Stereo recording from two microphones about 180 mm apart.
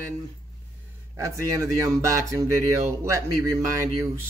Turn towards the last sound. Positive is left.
turn(degrees=-20)  # may be behind; listen again after turning